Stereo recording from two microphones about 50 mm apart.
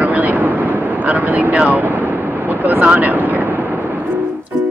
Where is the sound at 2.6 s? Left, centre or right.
Right.